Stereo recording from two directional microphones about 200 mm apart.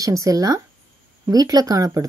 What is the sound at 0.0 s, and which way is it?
Speech, 15° right (ahead or behind).